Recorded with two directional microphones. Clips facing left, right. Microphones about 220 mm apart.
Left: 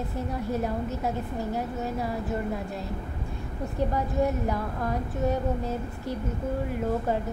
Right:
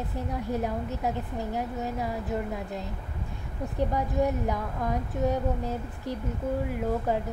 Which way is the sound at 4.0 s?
15° right (ahead or behind).